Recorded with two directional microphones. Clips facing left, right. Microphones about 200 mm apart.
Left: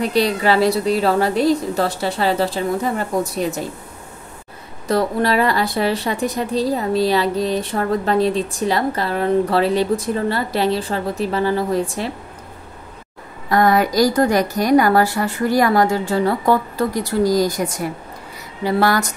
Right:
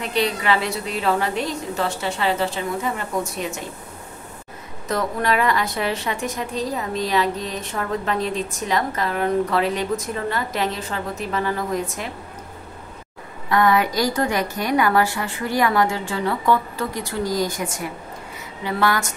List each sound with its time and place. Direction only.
0.0 s a woman's voice: 35° left (ahead or behind)
4.8 s a woman's voice: 35° left (ahead or behind)
13.5 s a woman's voice: 40° left (ahead or behind)